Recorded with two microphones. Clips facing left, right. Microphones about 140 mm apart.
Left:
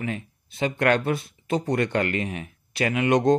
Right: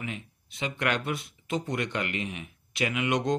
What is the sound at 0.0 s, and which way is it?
Speech, 40° left (ahead or behind).